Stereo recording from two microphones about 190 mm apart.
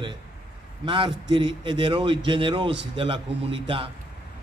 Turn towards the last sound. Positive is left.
turn(degrees=-30)  # may be behind; listen again after turning